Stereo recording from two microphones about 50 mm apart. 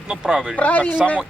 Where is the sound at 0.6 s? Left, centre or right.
Left.